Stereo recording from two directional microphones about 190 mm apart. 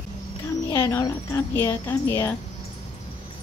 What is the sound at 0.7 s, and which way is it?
A woman's voice, 15° left (ahead or behind).